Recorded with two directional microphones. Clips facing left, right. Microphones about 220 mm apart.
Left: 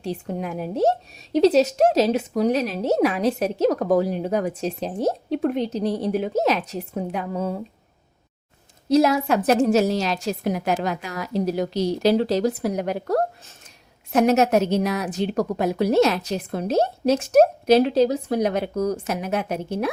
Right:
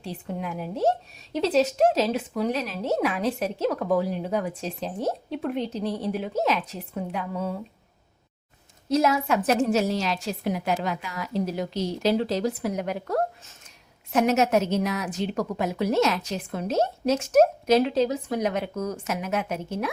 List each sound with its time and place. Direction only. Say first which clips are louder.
0.0 s a woman's voice: left 5 dB; 40° left (ahead or behind)
8.9 s a woman's voice: left 4 dB; 35° left (ahead or behind)